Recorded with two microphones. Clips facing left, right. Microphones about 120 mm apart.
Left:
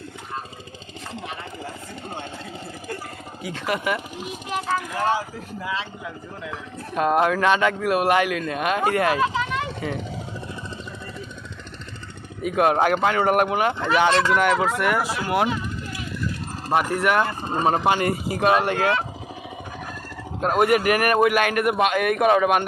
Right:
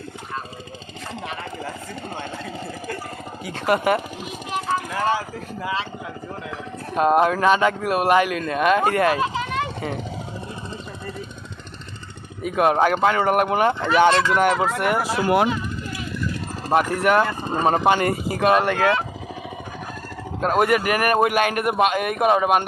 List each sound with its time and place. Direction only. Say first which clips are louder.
3.4 s a man's voice: right 5 dB; 45° right (ahead or behind)
6.9 s speech: right 2 dB; 35° right (ahead or behind)
12.4 s speech: right 1 dB; 35° right (ahead or behind)
16.7 s a man's voice: right 2 dB; 40° right (ahead or behind)
18.8 s speech: right 2 dB; 40° right (ahead or behind)
20.4 s a man's voice: even; 45° right (ahead or behind); by 22.6 s 25° right (ahead or behind)